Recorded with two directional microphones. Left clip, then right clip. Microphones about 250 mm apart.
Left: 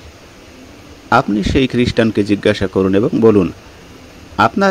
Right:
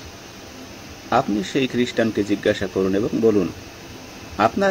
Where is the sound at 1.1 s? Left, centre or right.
Left.